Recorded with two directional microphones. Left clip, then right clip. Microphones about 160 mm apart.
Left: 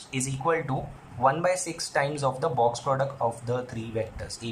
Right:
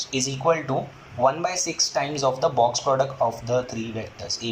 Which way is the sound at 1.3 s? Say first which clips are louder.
Even; centre (ahead or behind).